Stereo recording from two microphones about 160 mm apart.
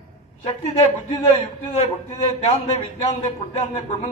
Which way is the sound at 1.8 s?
45° left (ahead or behind).